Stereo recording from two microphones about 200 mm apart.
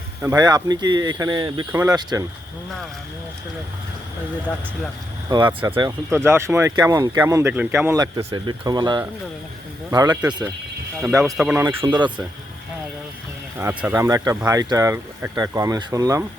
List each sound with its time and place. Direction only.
0.2 s speech: 15° right (ahead or behind)
5.3 s speech: 20° right (ahead or behind)
11.9 s speech: 20° right (ahead or behind)
13.6 s speech: 10° right (ahead or behind)